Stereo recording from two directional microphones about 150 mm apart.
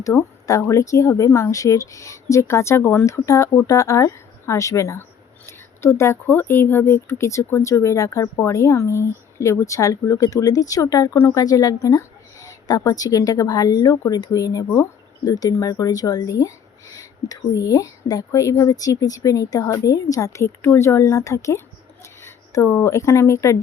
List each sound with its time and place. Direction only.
0.0 s speech: 20° left (ahead or behind)